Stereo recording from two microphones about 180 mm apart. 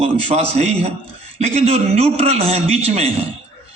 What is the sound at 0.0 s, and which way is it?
A man's voice, 35° right (ahead or behind).